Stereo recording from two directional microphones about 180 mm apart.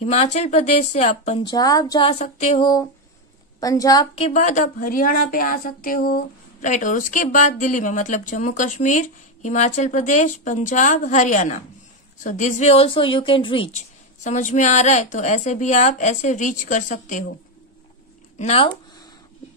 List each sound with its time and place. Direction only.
0.0 s a woman's voice: 35° left (ahead or behind)
1.5 s a woman's voice: 20° left (ahead or behind)
2.0 s a woman's voice: 35° left (ahead or behind); by 4.1 s 20° left (ahead or behind)
4.1 s a woman's voice: 40° left (ahead or behind)
13.7 s a woman's voice: 40° left (ahead or behind)
18.4 s a woman's voice: 35° left (ahead or behind)